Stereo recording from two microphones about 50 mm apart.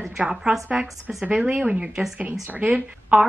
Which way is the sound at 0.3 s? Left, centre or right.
Centre.